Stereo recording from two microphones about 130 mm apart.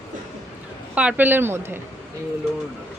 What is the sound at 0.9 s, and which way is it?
Speech, 10° right (ahead or behind).